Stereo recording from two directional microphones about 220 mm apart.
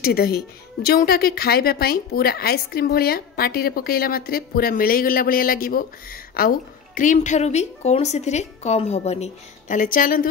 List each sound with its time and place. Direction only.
0.0 s a woman's voice: 45° left (ahead or behind)